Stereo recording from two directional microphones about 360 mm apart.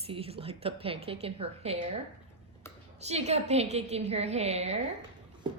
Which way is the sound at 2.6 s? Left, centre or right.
Centre.